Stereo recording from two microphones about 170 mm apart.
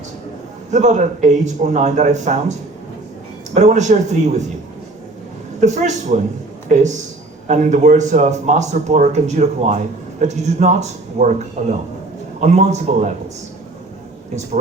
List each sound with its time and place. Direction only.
0.7 s speech: 45° right (ahead or behind)
5.5 s speech: 45° right (ahead or behind)
12.4 s a man's voice: 40° right (ahead or behind)